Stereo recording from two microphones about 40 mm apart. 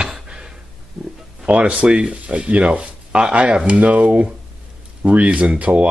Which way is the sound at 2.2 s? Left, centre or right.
Right.